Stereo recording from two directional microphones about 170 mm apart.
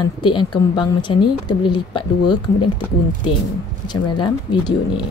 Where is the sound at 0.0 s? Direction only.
30° left (ahead or behind).